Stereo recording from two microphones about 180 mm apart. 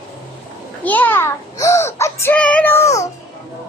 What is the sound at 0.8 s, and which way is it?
A child's voice, 10° left (ahead or behind).